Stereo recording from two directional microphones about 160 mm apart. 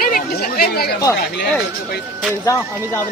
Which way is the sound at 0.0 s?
60° left (ahead or behind).